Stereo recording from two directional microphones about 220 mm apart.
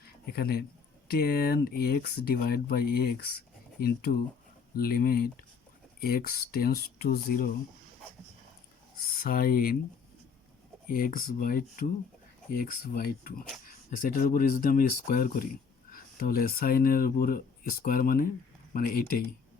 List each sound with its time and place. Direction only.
0.0 s a sound: 45° left (ahead or behind)
1.0 s speech: 45° left (ahead or behind)
9.1 s speech: 40° left (ahead or behind)
10.8 s speech: 40° left (ahead or behind)